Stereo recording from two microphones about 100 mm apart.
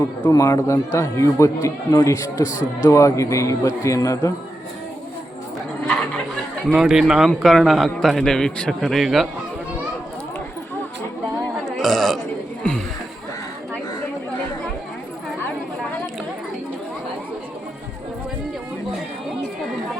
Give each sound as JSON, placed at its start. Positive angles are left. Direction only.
{"t": 0.0, "sound": "a man's voice", "side_deg": 35}
{"t": 6.7, "sound": "a man's voice", "side_deg": -5}
{"t": 11.8, "sound": "burping", "side_deg": 0}
{"t": 12.7, "sound": "a sound", "side_deg": 10}